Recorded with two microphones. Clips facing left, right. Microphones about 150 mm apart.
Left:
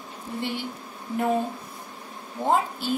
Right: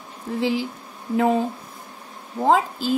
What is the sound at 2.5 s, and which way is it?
Speech, 90° right.